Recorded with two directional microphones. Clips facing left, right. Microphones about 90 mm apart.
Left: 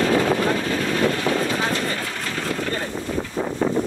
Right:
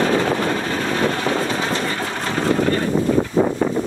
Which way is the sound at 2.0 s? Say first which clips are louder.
Right 5 dB; 35° right (ahead or behind).